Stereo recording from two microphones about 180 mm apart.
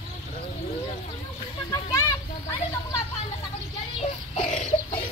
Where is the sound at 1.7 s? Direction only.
15° left (ahead or behind).